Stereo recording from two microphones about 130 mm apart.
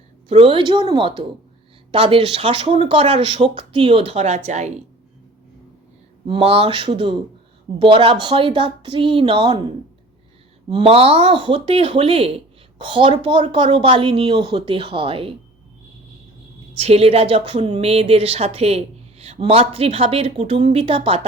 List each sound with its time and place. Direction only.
0.3 s a woman's voice: 45° right (ahead or behind); by 4.7 s 60° right (ahead or behind)
6.2 s a woman's voice: 45° right (ahead or behind)
10.7 s a woman's voice: 45° right (ahead or behind)
16.7 s a woman's voice: 50° right (ahead or behind)